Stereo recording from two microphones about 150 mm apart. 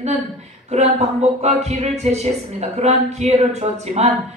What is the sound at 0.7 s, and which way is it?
Speech, 50° right (ahead or behind).